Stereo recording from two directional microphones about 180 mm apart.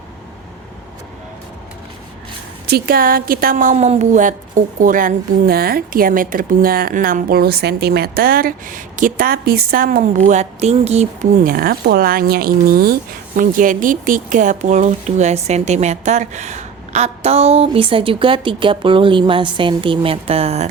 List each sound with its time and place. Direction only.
2.6 s a woman's voice: 60° right (ahead or behind); by 11.3 s 35° right (ahead or behind)
11.4 s speech: 55° right (ahead or behind); by 20.7 s 35° right (ahead or behind)